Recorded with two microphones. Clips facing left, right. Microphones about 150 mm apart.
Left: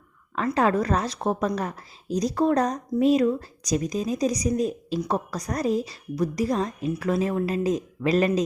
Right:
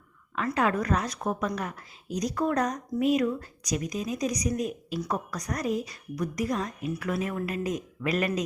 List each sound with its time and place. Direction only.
0.3 s a woman's voice: 35° left (ahead or behind)